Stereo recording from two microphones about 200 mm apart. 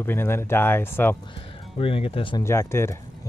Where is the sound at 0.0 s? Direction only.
10° left (ahead or behind).